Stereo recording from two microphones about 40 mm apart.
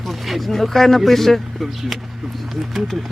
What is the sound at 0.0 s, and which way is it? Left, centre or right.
Speech, centre.